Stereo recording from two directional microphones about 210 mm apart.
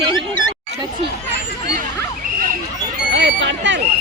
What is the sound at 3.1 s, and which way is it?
Speech, 60° right (ahead or behind).